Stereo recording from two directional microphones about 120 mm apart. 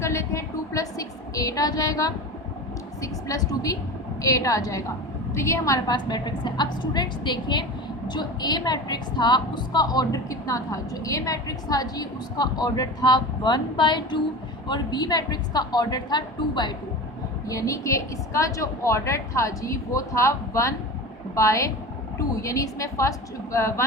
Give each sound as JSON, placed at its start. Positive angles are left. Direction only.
{"t": 0.0, "sound": "a sound", "side_deg": 25}
{"t": 3.0, "sound": "a woman's voice", "side_deg": 30}
{"t": 17.5, "sound": "a woman's voice", "side_deg": 30}